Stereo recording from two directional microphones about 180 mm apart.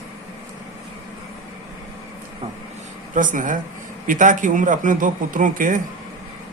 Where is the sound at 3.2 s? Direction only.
45° right (ahead or behind).